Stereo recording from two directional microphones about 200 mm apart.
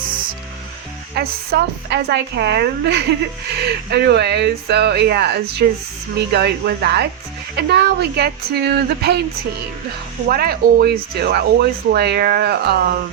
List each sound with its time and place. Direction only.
1.1 s speech: 50° right (ahead or behind)
10.2 s speech: 50° right (ahead or behind)